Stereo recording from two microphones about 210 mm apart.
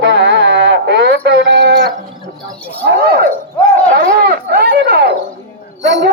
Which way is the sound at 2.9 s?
50° right (ahead or behind).